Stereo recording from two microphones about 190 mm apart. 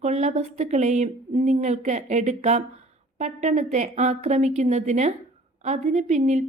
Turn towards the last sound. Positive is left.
turn(degrees=-35)  # may be behind; listen again after turning